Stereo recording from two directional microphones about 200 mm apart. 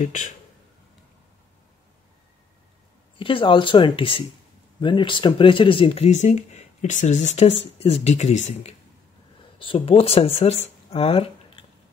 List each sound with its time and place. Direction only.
0.0 s speech: 40° left (ahead or behind)
3.2 s speech: 25° left (ahead or behind)